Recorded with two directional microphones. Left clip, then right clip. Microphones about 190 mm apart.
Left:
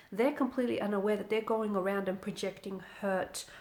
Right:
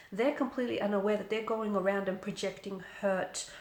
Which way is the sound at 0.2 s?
40° left (ahead or behind).